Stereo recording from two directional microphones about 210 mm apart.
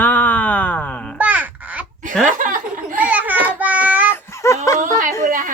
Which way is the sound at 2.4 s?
40° right (ahead or behind).